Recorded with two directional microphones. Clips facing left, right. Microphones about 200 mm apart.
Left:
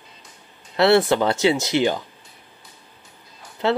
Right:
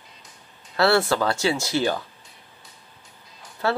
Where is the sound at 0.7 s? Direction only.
20° left (ahead or behind).